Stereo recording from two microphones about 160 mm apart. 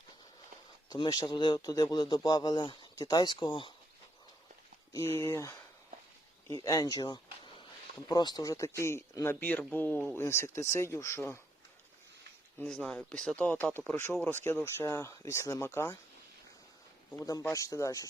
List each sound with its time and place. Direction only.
0.9 s speech: 25° left (ahead or behind)
4.9 s speech: 15° left (ahead or behind)
6.6 s speech: 20° left (ahead or behind)
12.5 s speech: 5° left (ahead or behind)
17.1 s speech: 20° left (ahead or behind)